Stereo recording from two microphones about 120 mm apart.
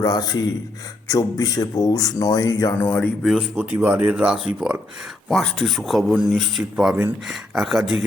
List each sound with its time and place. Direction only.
0.0 s speech: 35° left (ahead or behind)
2.8 s speech: 15° left (ahead or behind)
3.5 s speech: 20° right (ahead or behind); by 6.7 s centre (ahead or behind)
6.7 s speech: 15° right (ahead or behind)